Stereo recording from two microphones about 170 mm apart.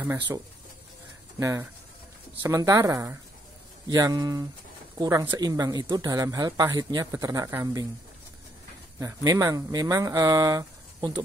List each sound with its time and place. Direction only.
1.4 s speech: 20° right (ahead or behind)
9.0 s speech: 20° right (ahead or behind)